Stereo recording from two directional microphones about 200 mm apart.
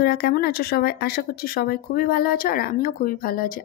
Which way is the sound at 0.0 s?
50° left (ahead or behind).